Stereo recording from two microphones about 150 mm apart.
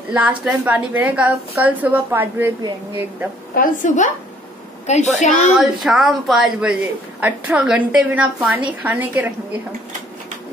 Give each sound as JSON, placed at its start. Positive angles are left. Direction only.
{"t": 0.1, "sound": "a woman's voice", "side_deg": -10}
{"t": 3.5, "sound": "a woman's voice", "side_deg": 60}
{"t": 5.6, "sound": "a woman's voice", "side_deg": 0}